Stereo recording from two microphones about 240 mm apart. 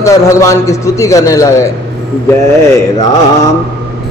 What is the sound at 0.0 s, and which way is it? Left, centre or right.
Mantra, centre.